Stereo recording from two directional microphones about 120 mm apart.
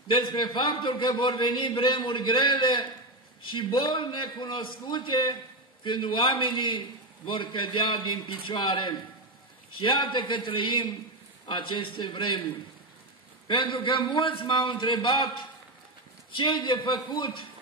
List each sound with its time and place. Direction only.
0.1 s a man's voice: 40° left (ahead or behind)
13.5 s a man's voice: 45° left (ahead or behind)